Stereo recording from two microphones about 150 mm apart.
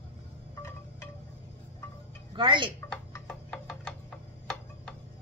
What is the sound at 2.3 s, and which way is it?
Speech, 35° right (ahead or behind).